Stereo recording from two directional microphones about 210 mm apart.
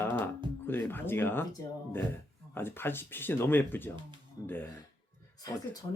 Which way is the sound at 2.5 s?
10° left (ahead or behind).